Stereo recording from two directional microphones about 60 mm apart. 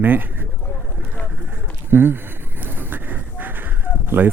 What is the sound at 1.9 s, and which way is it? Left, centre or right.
Speech, right.